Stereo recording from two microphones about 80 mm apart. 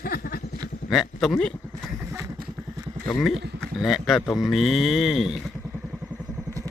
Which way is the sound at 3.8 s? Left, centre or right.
Centre.